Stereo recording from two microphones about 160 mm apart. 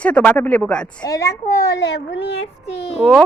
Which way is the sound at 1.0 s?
20° left (ahead or behind).